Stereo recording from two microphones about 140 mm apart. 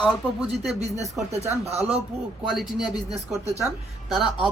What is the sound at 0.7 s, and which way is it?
Speech, 50° right (ahead or behind).